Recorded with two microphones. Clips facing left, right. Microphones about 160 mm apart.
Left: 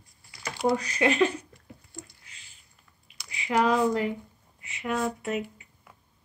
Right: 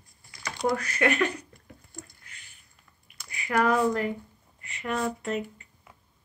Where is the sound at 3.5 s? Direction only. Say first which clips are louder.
Even; 15° left (ahead or behind).